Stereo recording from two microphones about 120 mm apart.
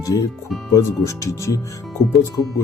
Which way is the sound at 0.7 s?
25° left (ahead or behind).